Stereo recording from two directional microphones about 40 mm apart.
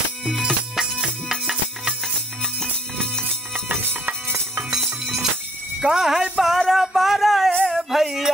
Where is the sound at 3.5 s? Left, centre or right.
Right.